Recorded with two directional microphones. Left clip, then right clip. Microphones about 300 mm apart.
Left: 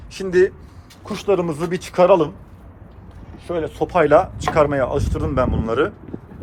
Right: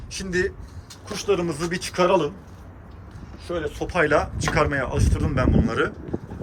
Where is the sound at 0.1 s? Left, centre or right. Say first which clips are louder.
Left 8 dB; centre.